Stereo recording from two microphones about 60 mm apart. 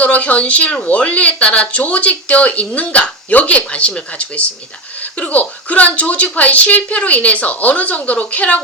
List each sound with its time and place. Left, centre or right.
0.0 s speech: left